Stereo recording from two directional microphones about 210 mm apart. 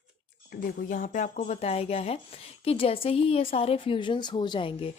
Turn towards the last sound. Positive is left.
turn(degrees=25)  # may be behind; listen again after turning